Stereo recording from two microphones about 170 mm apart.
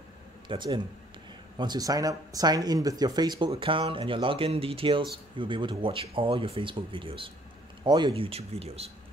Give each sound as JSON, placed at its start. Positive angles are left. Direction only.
{"t": 0.5, "sound": "speech", "side_deg": -25}